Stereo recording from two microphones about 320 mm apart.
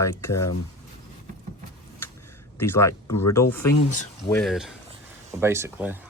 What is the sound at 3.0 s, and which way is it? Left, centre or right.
Speech, left.